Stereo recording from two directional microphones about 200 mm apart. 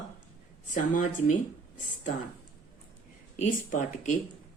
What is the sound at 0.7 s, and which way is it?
Speech, 40° left (ahead or behind).